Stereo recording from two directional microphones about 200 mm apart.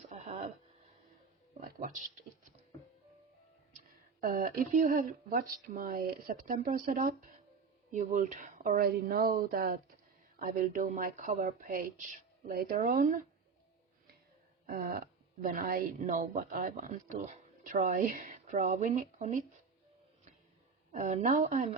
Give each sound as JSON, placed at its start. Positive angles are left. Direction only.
{"t": 0.1, "sound": "a sound", "side_deg": -35}
{"t": 1.6, "sound": "speech", "side_deg": -45}
{"t": 3.8, "sound": "speech", "side_deg": -40}
{"t": 14.7, "sound": "speech", "side_deg": -45}
{"t": 20.9, "sound": "speech", "side_deg": -35}